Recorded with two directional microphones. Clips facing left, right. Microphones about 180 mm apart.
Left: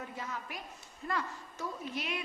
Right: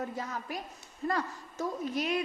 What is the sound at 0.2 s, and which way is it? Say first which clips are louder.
A woman's voice: right 5 dB; 40° right (ahead or behind).